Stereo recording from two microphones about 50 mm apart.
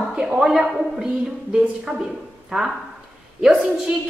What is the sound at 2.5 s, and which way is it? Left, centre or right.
A woman's voice, centre.